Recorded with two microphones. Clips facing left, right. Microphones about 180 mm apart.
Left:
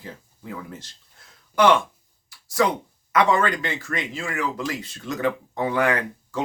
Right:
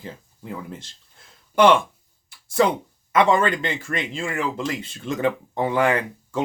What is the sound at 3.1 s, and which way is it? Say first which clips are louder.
Speech: right 2 dB; 25° right (ahead or behind).